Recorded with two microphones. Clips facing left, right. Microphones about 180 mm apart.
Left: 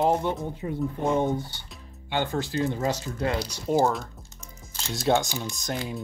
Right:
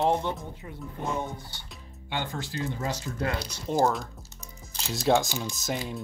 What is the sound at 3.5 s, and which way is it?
Speech, 5° left (ahead or behind).